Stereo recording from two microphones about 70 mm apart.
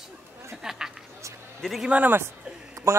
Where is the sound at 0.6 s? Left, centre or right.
Centre.